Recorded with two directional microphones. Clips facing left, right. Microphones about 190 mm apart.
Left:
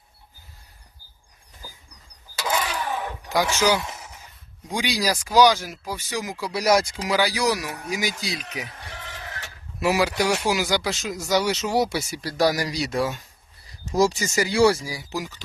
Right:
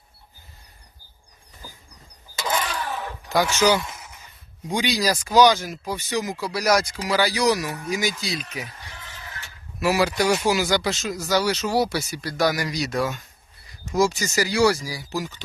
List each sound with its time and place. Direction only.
1.6 s dog: 5° left (ahead or behind)
2.4 s vehicle: 10° left (ahead or behind)
4.7 s speech: 10° left (ahead or behind)
6.5 s speech: 25° left (ahead or behind)
7.1 s speech: 15° left (ahead or behind)
8.8 s a sound: 70° left (ahead or behind)
10.0 s speech: 10° left (ahead or behind); by 14.1 s 35° left (ahead or behind)
14.2 s speech: 25° left (ahead or behind)